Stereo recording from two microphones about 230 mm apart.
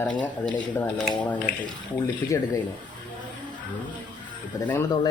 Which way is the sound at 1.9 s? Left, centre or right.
Centre.